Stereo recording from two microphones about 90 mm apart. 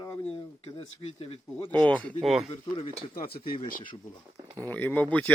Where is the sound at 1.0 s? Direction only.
90° left.